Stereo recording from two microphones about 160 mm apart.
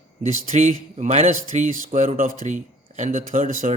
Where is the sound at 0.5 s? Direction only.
45° right (ahead or behind).